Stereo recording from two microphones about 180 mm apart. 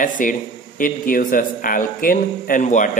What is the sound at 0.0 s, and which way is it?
A man's voice, 50° left (ahead or behind).